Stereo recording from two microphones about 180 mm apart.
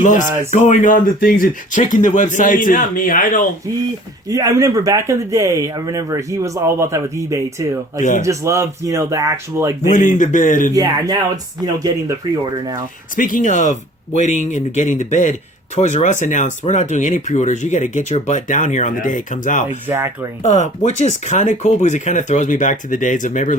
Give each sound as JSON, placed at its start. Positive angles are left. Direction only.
{"t": 0.0, "sound": "speech", "side_deg": 45}
{"t": 4.3, "sound": "speech", "side_deg": -20}
{"t": 9.9, "sound": "speech", "side_deg": 45}
{"t": 10.8, "sound": "speech", "side_deg": -20}
{"t": 13.1, "sound": "speech", "side_deg": 45}
{"t": 19.9, "sound": "speech", "side_deg": -10}
{"t": 20.4, "sound": "speech", "side_deg": 40}